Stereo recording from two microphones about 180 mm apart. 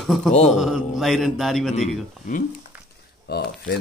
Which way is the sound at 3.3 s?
65° left (ahead or behind).